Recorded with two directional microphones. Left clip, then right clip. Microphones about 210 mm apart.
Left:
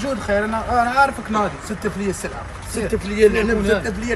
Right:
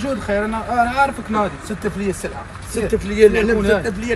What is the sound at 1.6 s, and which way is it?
Speech, centre (ahead or behind).